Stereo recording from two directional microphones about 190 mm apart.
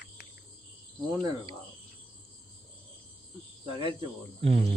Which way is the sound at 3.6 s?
30° right (ahead or behind).